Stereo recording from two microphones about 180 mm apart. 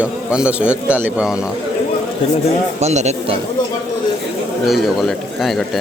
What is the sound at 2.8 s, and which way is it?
Speech, 40° right (ahead or behind).